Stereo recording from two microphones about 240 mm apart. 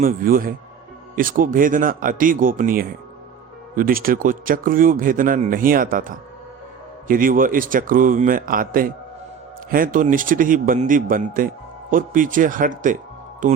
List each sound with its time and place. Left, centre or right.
0.0 s a man's voice: right